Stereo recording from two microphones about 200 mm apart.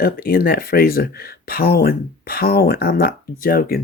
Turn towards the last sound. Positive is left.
turn(degrees=45)  # may be behind; listen again after turning